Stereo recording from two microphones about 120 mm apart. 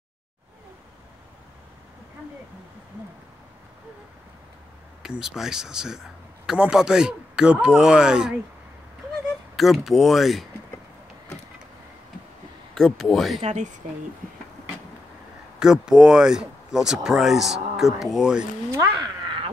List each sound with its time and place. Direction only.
5.0 s speech: 5° right (ahead or behind)
9.6 s speech: centre (ahead or behind)
12.7 s speech: centre (ahead or behind)
13.4 s speech: 70° right (ahead or behind)
15.6 s speech: 5° right (ahead or behind)
18.7 s speech: 25° right (ahead or behind)